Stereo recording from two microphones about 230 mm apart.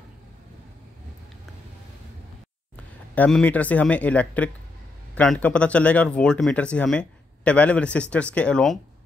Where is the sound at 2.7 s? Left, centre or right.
Centre.